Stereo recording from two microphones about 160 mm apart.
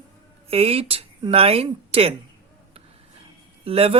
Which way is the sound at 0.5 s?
40° right (ahead or behind).